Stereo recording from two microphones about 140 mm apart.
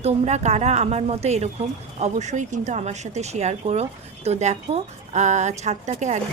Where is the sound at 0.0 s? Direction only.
55° right (ahead or behind).